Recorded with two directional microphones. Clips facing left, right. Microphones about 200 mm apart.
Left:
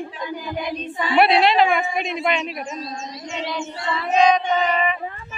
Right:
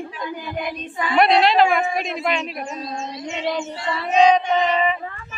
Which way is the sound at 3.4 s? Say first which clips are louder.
Right 4 dB; 40° right (ahead or behind).